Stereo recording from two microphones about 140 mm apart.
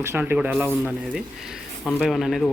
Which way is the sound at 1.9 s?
Centre (ahead or behind).